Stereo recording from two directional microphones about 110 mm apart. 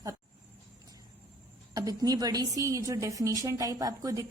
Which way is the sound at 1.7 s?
35° right (ahead or behind).